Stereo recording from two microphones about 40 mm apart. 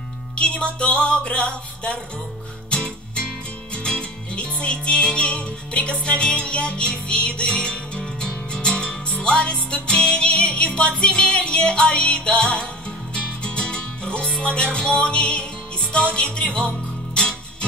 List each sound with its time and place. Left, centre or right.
0.4 s music: left